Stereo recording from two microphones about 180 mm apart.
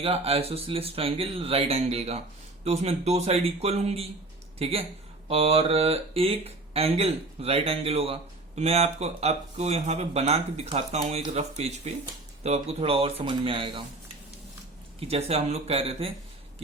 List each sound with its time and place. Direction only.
0.0 s speech: 35° right (ahead or behind)
15.0 s speech: 35° right (ahead or behind)